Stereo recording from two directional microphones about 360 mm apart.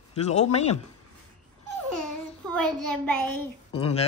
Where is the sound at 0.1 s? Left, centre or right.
Centre.